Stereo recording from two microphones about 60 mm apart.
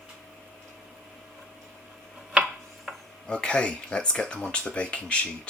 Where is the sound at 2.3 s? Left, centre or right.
Centre.